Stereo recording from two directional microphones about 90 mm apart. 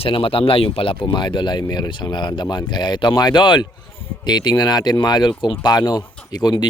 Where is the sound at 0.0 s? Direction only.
85° left; by 5.5 s 60° left (ahead or behind).